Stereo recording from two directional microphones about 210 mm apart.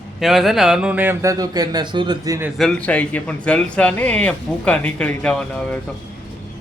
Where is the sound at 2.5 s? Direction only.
5° left (ahead or behind).